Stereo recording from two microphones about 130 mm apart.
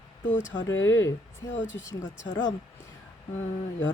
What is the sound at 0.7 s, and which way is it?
Mantra, 20° left (ahead or behind).